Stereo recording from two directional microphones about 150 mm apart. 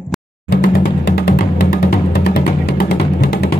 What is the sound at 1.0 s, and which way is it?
Music, 90° left.